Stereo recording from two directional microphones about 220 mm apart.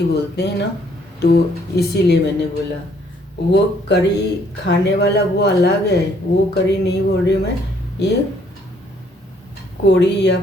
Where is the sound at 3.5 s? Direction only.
50° left (ahead or behind).